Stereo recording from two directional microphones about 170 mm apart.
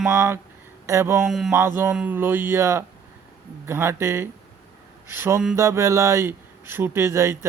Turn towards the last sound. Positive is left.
turn(degrees=-15)  # may be behind; listen again after turning